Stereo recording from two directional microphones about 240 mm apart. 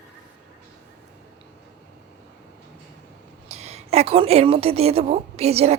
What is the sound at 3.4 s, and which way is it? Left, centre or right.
A woman's voice, right.